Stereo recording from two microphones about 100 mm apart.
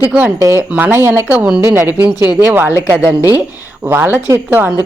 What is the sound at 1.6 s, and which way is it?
Speech, 30° right (ahead or behind).